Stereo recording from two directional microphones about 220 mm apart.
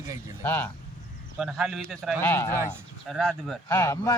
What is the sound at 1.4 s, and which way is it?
Speech, centre (ahead or behind).